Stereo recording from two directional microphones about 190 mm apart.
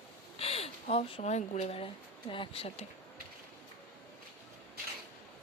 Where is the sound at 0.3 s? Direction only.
30° left (ahead or behind).